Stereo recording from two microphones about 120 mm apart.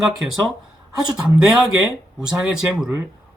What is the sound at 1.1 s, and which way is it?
Speech, 5° right (ahead or behind).